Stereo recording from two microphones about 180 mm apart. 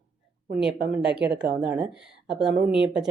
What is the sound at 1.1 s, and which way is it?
Speech, 70° right (ahead or behind).